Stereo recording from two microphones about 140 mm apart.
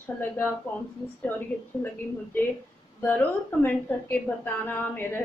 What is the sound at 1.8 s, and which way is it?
Speech, 15° left (ahead or behind).